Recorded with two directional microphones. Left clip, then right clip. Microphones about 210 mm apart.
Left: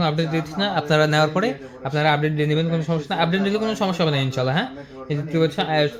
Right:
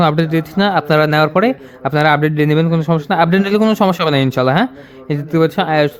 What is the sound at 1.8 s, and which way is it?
A man's voice, 50° right (ahead or behind).